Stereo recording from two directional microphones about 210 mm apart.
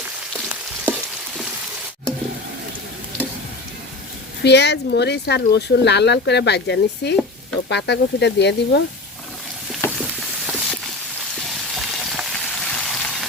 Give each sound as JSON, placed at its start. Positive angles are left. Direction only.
{"t": 0.3, "sound": "frying", "side_deg": -5}
{"t": 4.4, "sound": "speech", "side_deg": 55}
{"t": 10.0, "sound": "a sound", "side_deg": 0}
{"t": 11.5, "sound": "frying", "side_deg": 0}